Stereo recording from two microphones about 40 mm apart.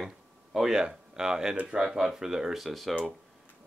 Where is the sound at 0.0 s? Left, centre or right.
Centre.